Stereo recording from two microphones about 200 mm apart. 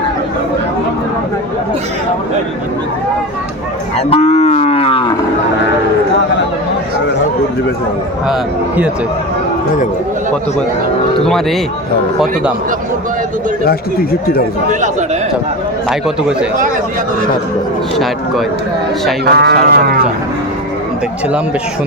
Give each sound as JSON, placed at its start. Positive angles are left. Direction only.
{"t": 3.9, "sound": "cattle", "side_deg": 30}
{"t": 8.3, "sound": "a man's voice", "side_deg": -5}
{"t": 11.3, "sound": "a man's voice", "side_deg": 0}
{"t": 13.7, "sound": "speech", "side_deg": 50}
{"t": 14.7, "sound": "a man's voice", "side_deg": -40}
{"t": 15.9, "sound": "a man's voice", "side_deg": -5}
{"t": 17.9, "sound": "a man's voice", "side_deg": 0}
{"t": 19.2, "sound": "speech", "side_deg": -55}